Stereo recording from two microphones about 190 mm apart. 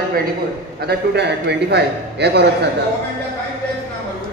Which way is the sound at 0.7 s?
60° right (ahead or behind).